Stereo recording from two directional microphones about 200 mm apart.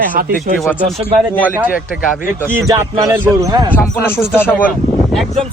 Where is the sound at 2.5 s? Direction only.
10° right (ahead or behind).